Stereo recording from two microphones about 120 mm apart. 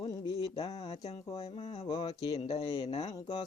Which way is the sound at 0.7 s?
60° left (ahead or behind).